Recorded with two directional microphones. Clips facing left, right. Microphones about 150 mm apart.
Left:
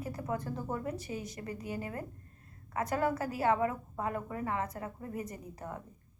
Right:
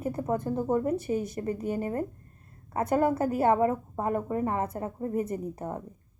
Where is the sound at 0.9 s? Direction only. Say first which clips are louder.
Right 11 dB; 55° right (ahead or behind).